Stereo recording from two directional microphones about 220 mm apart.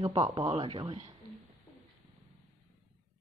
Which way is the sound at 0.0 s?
25° right (ahead or behind).